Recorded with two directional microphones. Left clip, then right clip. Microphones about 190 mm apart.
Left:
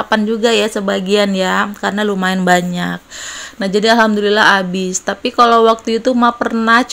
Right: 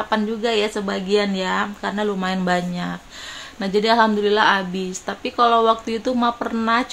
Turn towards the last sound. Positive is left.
turn(degrees=30)  # may be behind; listen again after turning